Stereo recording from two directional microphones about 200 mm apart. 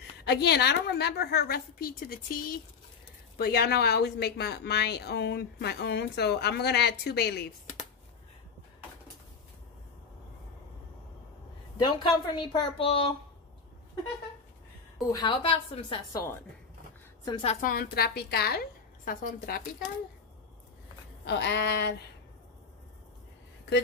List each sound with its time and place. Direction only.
0.2 s a woman's voice: 55° left (ahead or behind)
11.7 s a woman's voice: 20° left (ahead or behind)
15.1 s a woman's voice: 25° left (ahead or behind)
17.6 s a woman's voice: 45° left (ahead or behind)
21.3 s speech: 60° left (ahead or behind)